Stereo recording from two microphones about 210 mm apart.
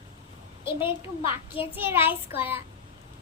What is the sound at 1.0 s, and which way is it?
Speech, 25° left (ahead or behind).